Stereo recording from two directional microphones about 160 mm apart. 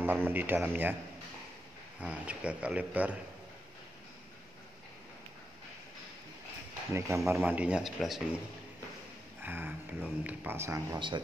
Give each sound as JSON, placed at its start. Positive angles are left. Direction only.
{"t": 0.0, "sound": "speech", "side_deg": -10}
{"t": 2.0, "sound": "speech", "side_deg": -10}
{"t": 6.9, "sound": "speech", "side_deg": -15}
{"t": 9.4, "sound": "speech", "side_deg": -10}
{"t": 11.0, "sound": "speech", "side_deg": -30}